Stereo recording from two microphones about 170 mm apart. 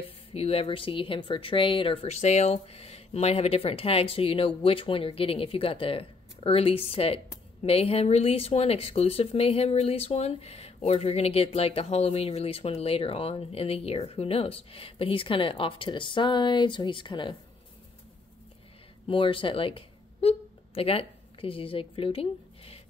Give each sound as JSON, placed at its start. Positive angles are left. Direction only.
{"t": 0.3, "sound": "speech", "side_deg": 35}
{"t": 19.0, "sound": "speech", "side_deg": 30}